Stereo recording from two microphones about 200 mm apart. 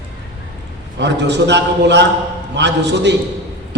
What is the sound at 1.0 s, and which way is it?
A man's voice, 60° right (ahead or behind).